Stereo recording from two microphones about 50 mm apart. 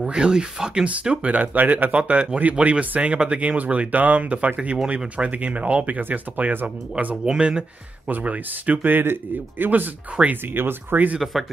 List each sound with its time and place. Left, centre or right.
0.0 s speech: centre
1.1 s speech: right
7.2 s speech: centre
8.1 s speech: right
8.8 s a man's voice: right
10.1 s speech: right
10.5 s a man's voice: right